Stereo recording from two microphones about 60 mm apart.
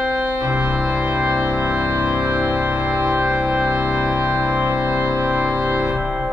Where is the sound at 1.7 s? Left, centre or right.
Centre.